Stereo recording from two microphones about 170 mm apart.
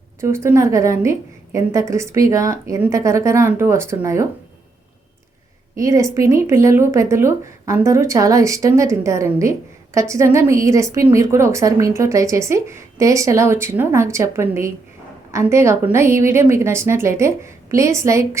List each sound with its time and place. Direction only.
0.2 s speech: 15° right (ahead or behind)
5.7 s speech: 20° right (ahead or behind)